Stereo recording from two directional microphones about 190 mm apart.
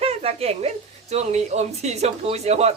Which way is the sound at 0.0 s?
30° right (ahead or behind).